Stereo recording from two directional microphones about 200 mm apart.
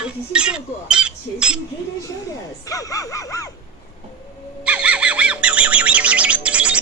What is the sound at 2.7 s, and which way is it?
Speech, 15° left (ahead or behind).